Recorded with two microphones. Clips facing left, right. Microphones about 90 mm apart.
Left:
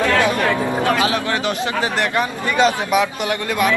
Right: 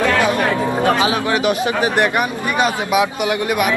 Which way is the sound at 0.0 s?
20° right (ahead or behind).